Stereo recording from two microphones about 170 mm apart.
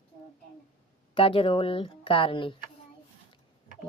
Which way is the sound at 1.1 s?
30° left (ahead or behind).